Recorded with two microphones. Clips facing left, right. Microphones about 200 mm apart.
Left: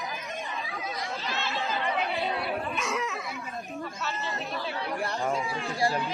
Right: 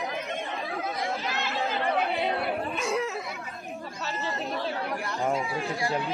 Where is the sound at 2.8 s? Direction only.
30° right (ahead or behind).